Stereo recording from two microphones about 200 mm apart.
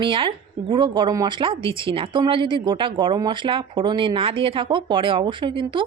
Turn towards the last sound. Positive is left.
turn(degrees=-25)  # may be behind; listen again after turning